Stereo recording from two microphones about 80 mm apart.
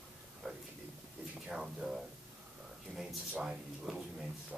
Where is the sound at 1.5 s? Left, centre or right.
Centre.